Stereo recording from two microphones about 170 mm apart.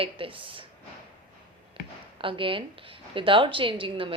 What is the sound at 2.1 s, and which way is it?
A woman's voice, 30° right (ahead or behind).